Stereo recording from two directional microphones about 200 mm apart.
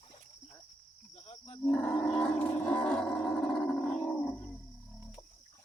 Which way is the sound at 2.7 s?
5° left (ahead or behind).